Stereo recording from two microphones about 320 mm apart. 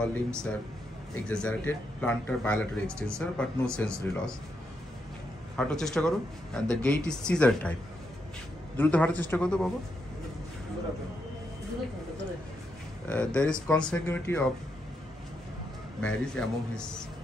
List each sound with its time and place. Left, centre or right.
0.0 s speech: centre
5.6 s speech: centre
8.7 s speech: centre
13.1 s speech: centre
16.0 s speech: centre